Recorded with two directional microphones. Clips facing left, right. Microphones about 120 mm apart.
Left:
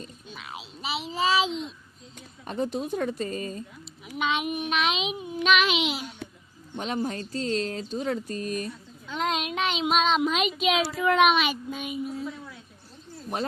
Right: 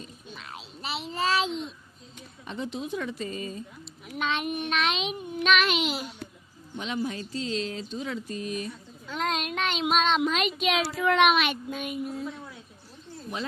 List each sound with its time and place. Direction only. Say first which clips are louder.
0.3 s a sound: left 3 dB; 5° left (ahead or behind)
2.4 s speech: left 5 dB; 45° left (ahead or behind)
4.0 s speech: left 2 dB; 5° left (ahead or behind)
6.7 s speech: left 2 dB; 45° left (ahead or behind)
8.6 s speech: left 1 dB; centre (ahead or behind)
13.3 s speech: left 4 dB; 50° left (ahead or behind)